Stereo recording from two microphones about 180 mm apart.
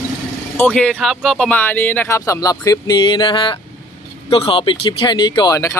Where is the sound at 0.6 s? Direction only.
5° left (ahead or behind).